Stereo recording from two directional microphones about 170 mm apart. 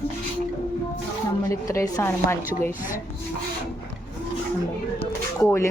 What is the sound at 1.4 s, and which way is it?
Speech, 15° left (ahead or behind).